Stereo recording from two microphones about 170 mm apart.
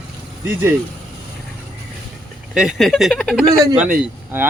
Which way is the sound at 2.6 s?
Centre (ahead or behind).